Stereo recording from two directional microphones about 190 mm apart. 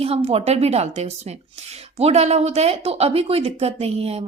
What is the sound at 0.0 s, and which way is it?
Speech, 30° right (ahead or behind).